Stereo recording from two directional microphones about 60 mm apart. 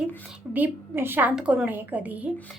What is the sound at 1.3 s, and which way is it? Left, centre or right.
Speech, centre.